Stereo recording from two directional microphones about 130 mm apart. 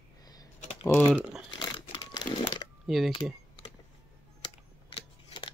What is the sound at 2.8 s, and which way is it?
Speech, centre (ahead or behind).